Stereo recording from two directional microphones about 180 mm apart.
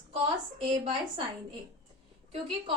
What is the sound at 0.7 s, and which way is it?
Speech, 30° right (ahead or behind).